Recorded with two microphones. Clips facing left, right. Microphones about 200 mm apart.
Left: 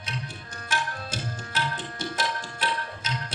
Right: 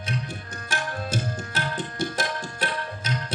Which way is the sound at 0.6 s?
45° right (ahead or behind).